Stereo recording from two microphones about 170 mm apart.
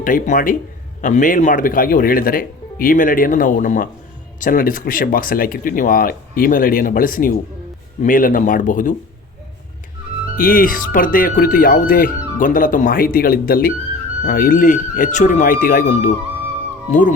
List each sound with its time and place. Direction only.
0.0 s speech: 55° left (ahead or behind)
10.3 s speech: 55° left (ahead or behind)